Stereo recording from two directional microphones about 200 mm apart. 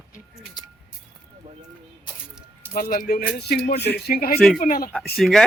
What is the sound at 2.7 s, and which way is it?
Speech, 45° left (ahead or behind).